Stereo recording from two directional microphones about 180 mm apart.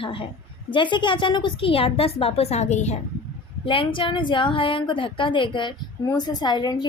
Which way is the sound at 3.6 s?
30° left (ahead or behind).